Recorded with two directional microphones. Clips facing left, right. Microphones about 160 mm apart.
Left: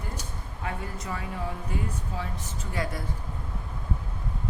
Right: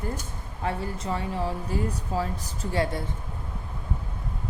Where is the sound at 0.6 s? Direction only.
30° right (ahead or behind).